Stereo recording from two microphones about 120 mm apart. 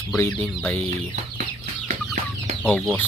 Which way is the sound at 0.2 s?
20° left (ahead or behind).